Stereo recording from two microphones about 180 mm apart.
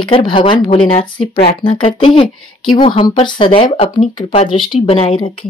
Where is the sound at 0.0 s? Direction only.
25° left (ahead or behind).